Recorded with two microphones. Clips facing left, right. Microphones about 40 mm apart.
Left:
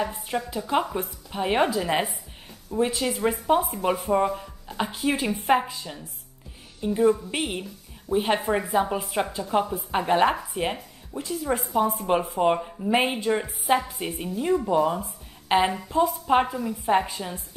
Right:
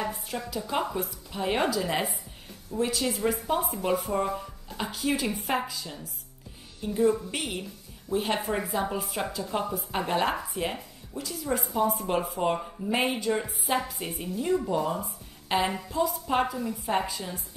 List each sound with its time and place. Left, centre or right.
0.6 s a woman's voice: centre